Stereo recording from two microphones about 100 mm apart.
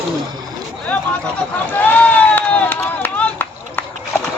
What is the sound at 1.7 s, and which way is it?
Run, 20° left (ahead or behind).